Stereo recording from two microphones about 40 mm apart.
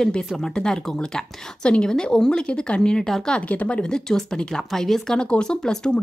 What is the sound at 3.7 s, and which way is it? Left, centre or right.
Speech, centre.